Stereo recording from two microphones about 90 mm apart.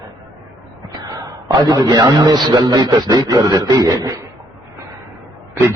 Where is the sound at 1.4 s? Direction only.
40° right (ahead or behind).